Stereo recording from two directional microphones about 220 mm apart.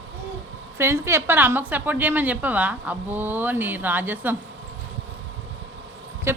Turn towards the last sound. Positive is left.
turn(degrees=-10)  # may be behind; listen again after turning